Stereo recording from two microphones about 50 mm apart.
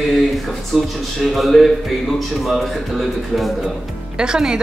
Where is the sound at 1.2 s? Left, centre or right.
Centre.